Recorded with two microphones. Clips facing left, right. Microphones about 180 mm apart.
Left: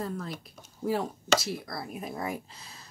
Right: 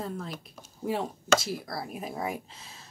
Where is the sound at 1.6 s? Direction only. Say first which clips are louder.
Right 1 dB; 5° right (ahead or behind).